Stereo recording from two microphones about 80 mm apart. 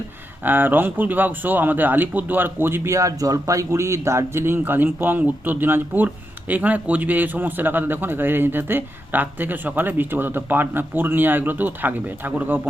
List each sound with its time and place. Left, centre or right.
0.4 s a man's voice: right
2.9 s a man's voice: right